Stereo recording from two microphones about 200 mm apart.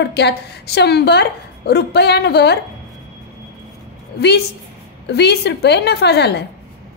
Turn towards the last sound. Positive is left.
turn(degrees=55)  # may be behind; listen again after turning